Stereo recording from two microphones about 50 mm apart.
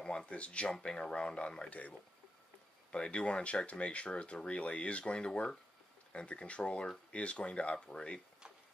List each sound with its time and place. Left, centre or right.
0.3 s speech: left